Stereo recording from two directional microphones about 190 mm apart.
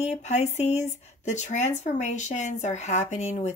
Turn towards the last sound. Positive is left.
turn(degrees=35)  # may be behind; listen again after turning